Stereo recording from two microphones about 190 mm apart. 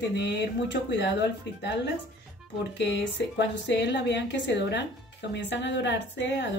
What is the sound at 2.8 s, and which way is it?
A woman's voice, 70° left (ahead or behind).